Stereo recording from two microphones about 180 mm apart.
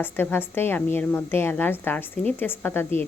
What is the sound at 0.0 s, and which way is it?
A woman's voice, 10° left (ahead or behind).